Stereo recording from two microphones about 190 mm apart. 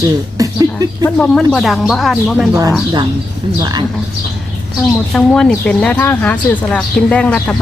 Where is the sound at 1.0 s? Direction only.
5° left (ahead or behind).